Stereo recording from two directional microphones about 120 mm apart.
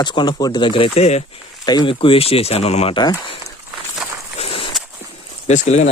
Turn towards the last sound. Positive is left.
turn(degrees=70)  # may be behind; listen again after turning